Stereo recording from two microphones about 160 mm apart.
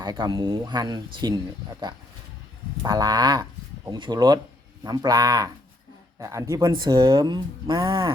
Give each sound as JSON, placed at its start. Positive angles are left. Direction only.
{"t": 0.0, "sound": "speech", "side_deg": -25}
{"t": 2.8, "sound": "speech", "side_deg": -25}